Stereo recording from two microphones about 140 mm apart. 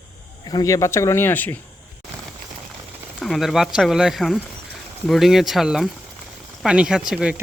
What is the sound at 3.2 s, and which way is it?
Speech, centre (ahead or behind).